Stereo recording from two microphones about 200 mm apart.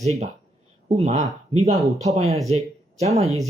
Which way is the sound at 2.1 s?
30° right (ahead or behind).